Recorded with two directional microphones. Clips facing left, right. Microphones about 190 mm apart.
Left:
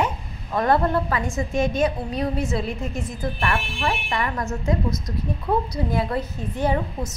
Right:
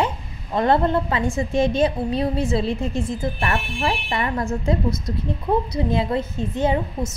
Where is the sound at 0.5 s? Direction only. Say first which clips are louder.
Right 2 dB; 25° right (ahead or behind).